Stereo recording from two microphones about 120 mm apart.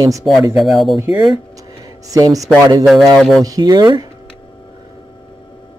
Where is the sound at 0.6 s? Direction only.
Centre (ahead or behind).